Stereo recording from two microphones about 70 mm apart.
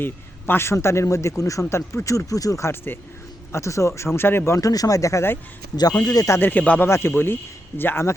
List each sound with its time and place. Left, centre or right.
0.0 s a man's voice: left
2.6 s a man's voice: left
3.5 s speech: left
6.3 s speech: left
6.8 s a man's voice: left